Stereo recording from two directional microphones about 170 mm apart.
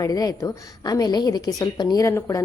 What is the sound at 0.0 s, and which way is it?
A woman's voice, 20° left (ahead or behind).